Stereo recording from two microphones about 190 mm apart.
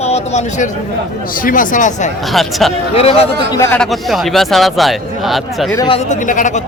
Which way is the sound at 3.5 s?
15° left (ahead or behind).